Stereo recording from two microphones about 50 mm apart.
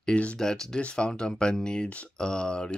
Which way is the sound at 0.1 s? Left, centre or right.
Left.